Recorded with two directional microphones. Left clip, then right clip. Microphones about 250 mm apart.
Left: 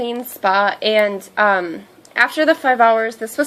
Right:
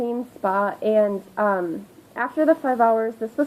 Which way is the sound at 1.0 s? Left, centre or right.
Left.